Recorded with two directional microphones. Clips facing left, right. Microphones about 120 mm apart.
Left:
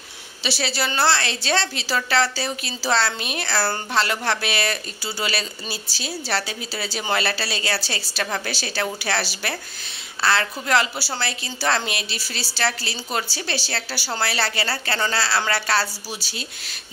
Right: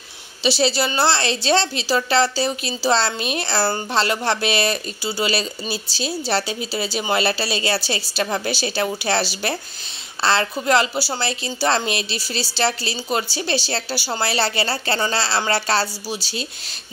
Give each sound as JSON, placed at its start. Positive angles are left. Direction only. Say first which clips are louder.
{"t": 0.4, "sound": "a woman's voice", "louder": "right 6 dB", "side_deg": -20}